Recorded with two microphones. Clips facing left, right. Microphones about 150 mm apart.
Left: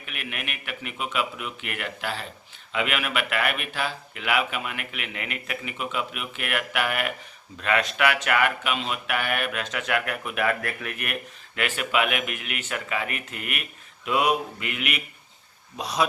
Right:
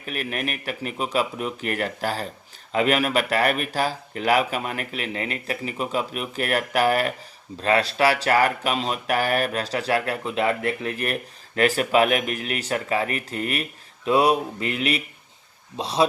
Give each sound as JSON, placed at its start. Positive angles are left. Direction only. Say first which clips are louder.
{"t": 0.0, "sound": "speech", "louder": "right 8 dB", "side_deg": -40}